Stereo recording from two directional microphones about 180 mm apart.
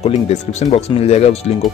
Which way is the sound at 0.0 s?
40° left (ahead or behind).